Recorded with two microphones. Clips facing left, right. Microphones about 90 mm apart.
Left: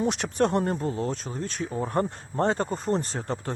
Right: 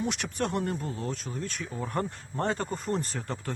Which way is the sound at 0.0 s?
30° left (ahead or behind).